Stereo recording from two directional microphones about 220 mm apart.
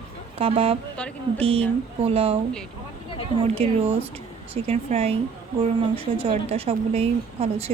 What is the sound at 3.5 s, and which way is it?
A woman's voice, 25° right (ahead or behind).